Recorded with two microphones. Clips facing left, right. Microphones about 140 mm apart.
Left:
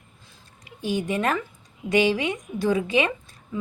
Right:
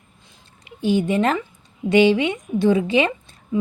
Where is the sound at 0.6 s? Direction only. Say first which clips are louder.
Right 7 dB; 30° right (ahead or behind).